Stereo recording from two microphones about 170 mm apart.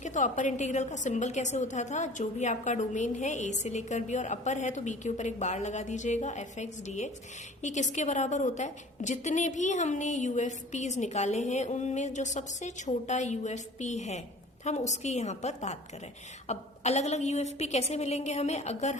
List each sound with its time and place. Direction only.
0.0 s a woman's voice: 45° left (ahead or behind)